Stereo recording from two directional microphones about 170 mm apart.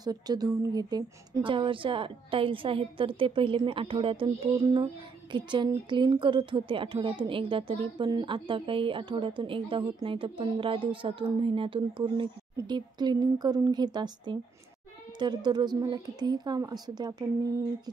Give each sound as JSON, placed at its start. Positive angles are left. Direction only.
{"t": 0.0, "sound": "a woman's voice", "side_deg": -25}
{"t": 5.3, "sound": "a woman's voice", "side_deg": -25}